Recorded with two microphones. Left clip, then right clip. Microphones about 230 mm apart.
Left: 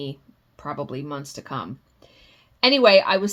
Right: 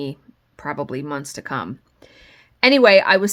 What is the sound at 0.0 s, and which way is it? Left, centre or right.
Speech, right.